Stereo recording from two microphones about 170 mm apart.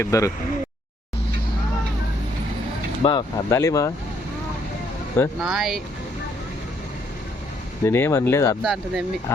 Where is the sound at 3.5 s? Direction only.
20° left (ahead or behind).